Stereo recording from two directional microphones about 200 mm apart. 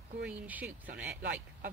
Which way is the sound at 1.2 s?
45° right (ahead or behind).